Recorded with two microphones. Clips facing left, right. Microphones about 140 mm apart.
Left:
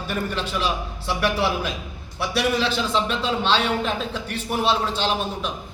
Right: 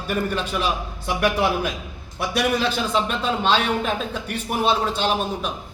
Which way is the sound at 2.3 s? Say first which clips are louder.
Even; 45° right (ahead or behind).